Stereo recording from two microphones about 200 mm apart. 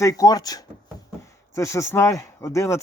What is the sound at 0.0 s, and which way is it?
Speech, 15° left (ahead or behind).